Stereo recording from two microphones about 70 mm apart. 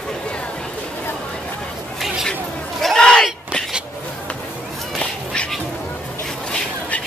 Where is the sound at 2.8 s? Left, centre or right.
Centre.